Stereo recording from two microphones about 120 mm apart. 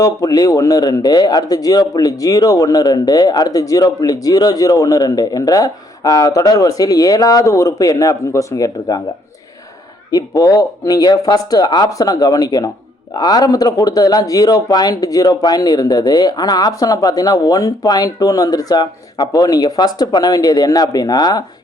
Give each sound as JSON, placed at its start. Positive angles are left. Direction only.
{"t": 0.0, "sound": "speech", "side_deg": 30}
{"t": 10.1, "sound": "speech", "side_deg": 30}